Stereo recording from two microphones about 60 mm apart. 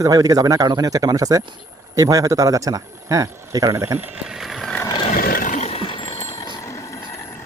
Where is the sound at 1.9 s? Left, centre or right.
Right.